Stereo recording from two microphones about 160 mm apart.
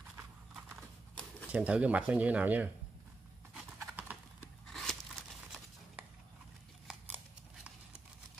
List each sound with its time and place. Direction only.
1.5 s speech: 10° right (ahead or behind)
3.8 s clip-clop: 10° right (ahead or behind)
4.6 s a sound: centre (ahead or behind)